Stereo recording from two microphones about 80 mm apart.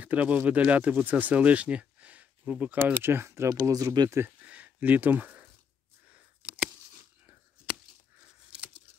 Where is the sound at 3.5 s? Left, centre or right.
Right.